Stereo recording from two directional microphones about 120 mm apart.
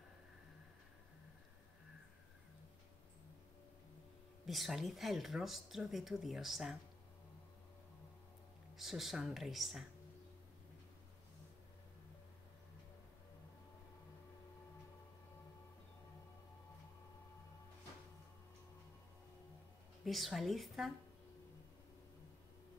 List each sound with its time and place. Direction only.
4.5 s speech: centre (ahead or behind)
8.7 s speech: centre (ahead or behind)
20.1 s speech: centre (ahead or behind)